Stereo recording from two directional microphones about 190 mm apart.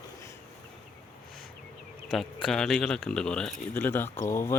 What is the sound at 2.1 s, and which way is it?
Speech, centre (ahead or behind).